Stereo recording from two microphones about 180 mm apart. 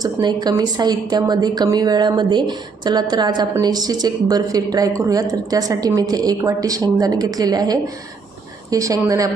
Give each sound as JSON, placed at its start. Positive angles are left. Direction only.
{"t": 0.0, "sound": "a woman's voice", "side_deg": -25}